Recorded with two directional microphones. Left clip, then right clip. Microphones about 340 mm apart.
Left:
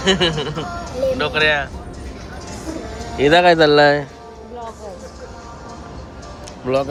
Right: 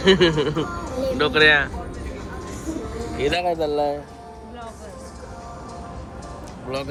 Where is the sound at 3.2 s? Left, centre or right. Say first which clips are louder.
Left 11 dB; left.